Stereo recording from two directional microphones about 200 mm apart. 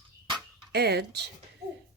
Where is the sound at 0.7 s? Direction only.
55° right (ahead or behind).